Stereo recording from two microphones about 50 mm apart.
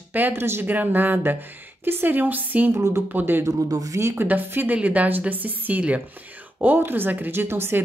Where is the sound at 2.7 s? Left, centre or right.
Right.